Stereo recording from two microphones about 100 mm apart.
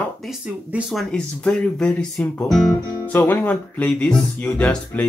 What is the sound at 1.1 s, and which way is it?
Speech, 10° left (ahead or behind).